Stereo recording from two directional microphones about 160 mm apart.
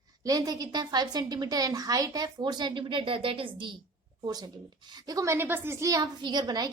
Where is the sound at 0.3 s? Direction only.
25° right (ahead or behind).